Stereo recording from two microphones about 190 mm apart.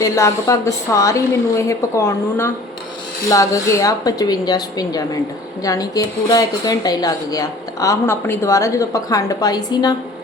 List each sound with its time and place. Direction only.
0.0 s a woman's voice: 15° left (ahead or behind)